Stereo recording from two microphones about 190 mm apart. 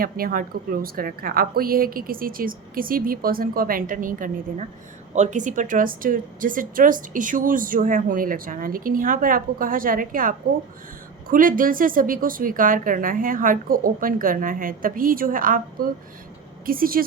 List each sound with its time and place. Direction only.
0.0 s speech: 50° right (ahead or behind)